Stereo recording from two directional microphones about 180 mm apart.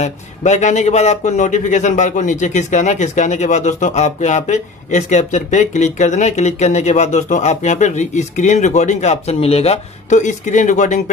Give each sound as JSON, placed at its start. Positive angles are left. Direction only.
{"t": 0.0, "sound": "a man's voice", "side_deg": 40}